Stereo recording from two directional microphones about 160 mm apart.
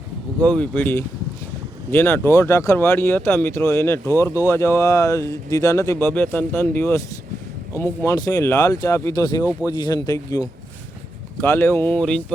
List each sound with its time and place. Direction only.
0.4 s speech: 5° left (ahead or behind)